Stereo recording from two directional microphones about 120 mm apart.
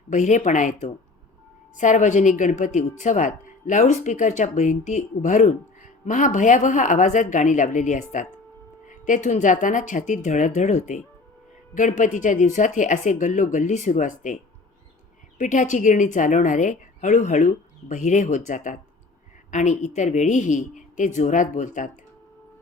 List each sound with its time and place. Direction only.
0.1 s speech: 90° left
15.4 s speech: 90° left